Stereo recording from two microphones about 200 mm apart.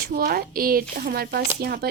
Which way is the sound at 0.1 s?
50° right (ahead or behind).